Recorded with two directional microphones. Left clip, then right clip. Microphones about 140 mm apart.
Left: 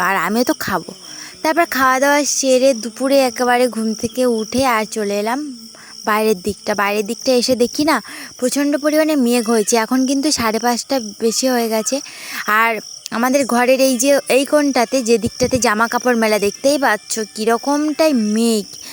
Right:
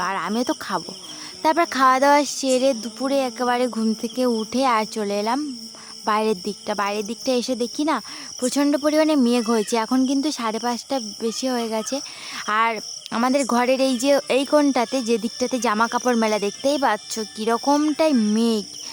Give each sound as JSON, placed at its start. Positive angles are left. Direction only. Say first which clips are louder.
{"t": 0.0, "sound": "cricket", "louder": "left 8 dB", "side_deg": 35}
{"t": 1.4, "sound": "speech", "louder": "left 3 dB", "side_deg": 15}
{"t": 8.4, "sound": "speech", "louder": "left 3 dB", "side_deg": 15}